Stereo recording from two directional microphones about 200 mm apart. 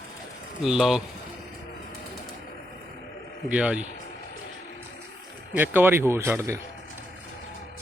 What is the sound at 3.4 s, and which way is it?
Speech, 5° right (ahead or behind).